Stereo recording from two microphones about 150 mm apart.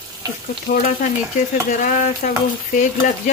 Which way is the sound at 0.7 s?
70° left (ahead or behind).